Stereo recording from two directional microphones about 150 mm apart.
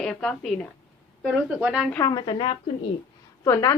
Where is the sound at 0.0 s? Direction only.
5° left (ahead or behind).